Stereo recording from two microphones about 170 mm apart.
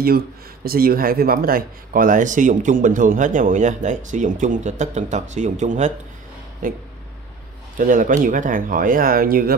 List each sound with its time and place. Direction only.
0.7 s speech: 60° right (ahead or behind)